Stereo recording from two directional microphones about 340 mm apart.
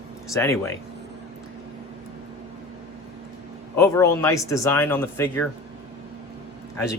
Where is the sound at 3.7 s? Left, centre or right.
Centre.